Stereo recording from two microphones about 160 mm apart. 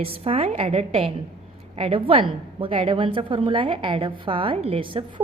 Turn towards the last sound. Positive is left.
turn(degrees=-30)  # may be behind; listen again after turning